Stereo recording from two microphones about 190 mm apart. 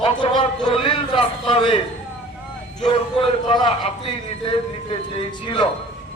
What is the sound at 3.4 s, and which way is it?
Speech, 25° left (ahead or behind).